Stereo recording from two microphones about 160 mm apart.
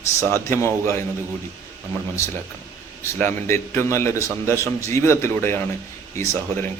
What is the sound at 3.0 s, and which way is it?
A man's voice, 15° left (ahead or behind).